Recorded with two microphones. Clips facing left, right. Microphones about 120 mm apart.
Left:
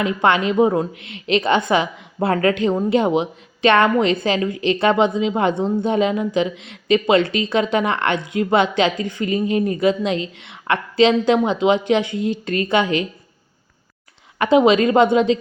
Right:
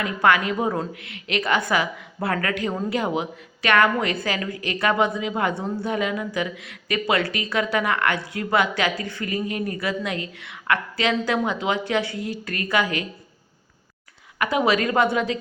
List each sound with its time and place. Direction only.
0.0 s a woman's voice: 25° left (ahead or behind)
14.3 s a woman's voice: 25° left (ahead or behind)